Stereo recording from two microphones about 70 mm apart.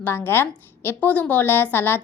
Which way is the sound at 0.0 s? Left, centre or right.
Left.